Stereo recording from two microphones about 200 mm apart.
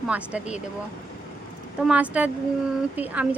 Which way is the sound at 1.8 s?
5° right (ahead or behind).